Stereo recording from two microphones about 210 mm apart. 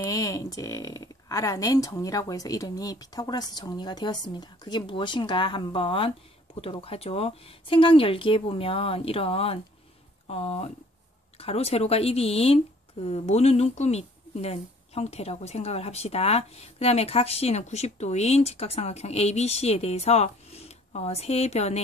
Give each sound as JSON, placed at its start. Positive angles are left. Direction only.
{"t": 0.1, "sound": "speech", "side_deg": 15}